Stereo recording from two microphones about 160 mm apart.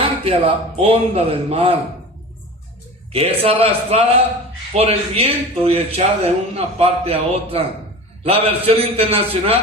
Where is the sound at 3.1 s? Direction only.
35° right (ahead or behind).